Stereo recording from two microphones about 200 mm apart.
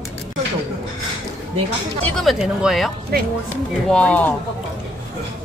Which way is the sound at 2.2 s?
Centre (ahead or behind).